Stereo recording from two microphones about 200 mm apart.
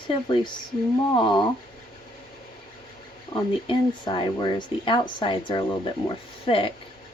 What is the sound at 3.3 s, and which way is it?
Speech, 25° left (ahead or behind).